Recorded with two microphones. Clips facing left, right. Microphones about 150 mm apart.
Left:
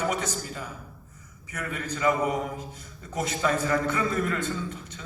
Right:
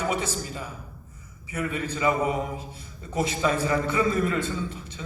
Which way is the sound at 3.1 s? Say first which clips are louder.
Right 2 dB; 10° right (ahead or behind).